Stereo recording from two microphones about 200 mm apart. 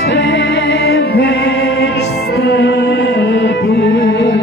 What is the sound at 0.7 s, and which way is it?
Music, 55° left (ahead or behind).